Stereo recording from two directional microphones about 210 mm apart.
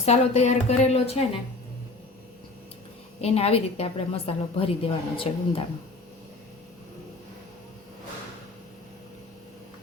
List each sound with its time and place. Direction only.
0.0 s a woman's voice: 30° left (ahead or behind)
3.2 s a woman's voice: 30° left (ahead or behind)